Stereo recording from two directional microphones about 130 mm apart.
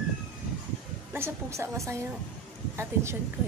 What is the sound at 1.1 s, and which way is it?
Speech, 20° right (ahead or behind).